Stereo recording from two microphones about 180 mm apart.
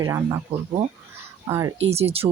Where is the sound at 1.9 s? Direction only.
35° right (ahead or behind).